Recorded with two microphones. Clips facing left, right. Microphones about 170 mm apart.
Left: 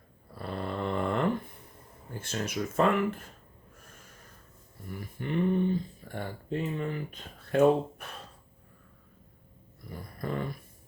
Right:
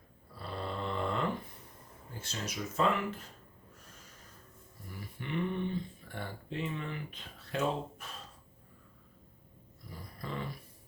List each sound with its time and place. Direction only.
0.3 s a sound: 55° left (ahead or behind)
2.1 s speech: 55° left (ahead or behind)
4.9 s speech: 45° left (ahead or behind)
9.9 s dog: 55° left (ahead or behind)